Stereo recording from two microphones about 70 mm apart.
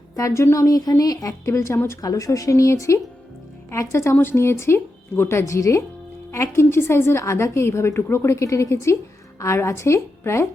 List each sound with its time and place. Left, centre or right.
0.2 s a woman's voice: left
2.0 s a woman's voice: left
6.6 s a woman's voice: left